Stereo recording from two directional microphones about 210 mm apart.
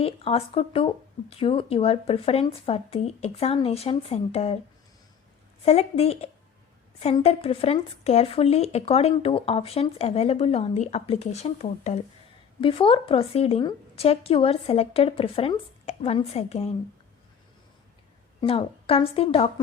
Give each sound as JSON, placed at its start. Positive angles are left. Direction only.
{"t": 0.0, "sound": "speech", "side_deg": 30}
{"t": 5.6, "sound": "speech", "side_deg": 30}
{"t": 18.3, "sound": "speech", "side_deg": 25}